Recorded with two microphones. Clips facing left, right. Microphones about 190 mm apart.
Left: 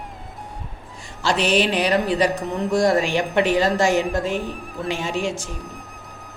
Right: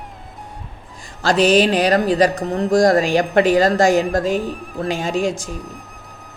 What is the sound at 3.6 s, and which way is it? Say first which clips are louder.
Carnatic music: right 4 dB; 90° right.